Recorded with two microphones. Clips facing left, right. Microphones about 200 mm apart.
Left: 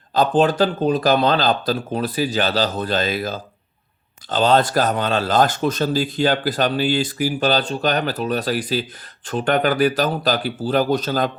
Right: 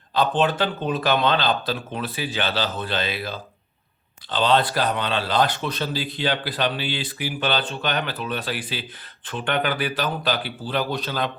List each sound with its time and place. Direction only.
0.1 s speech: 40° left (ahead or behind)